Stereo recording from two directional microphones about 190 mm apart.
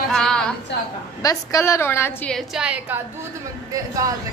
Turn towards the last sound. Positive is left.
turn(degrees=-20)  # may be behind; listen again after turning